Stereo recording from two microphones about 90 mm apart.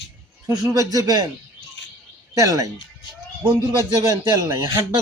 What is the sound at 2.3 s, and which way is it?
Speech, 40° right (ahead or behind).